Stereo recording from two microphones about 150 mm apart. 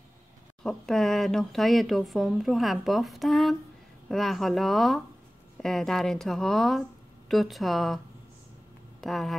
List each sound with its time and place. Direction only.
0.7 s speech: centre (ahead or behind)
9.0 s speech: centre (ahead or behind)